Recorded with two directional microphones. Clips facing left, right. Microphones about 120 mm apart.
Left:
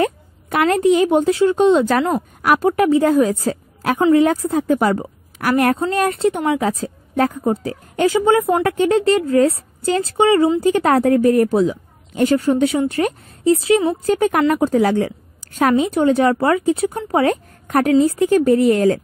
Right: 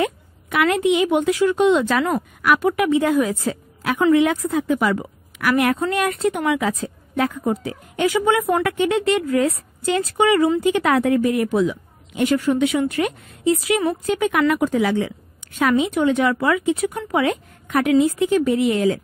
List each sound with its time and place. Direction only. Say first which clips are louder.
0.0 s a woman's voice: left 3 dB; 40° left (ahead or behind)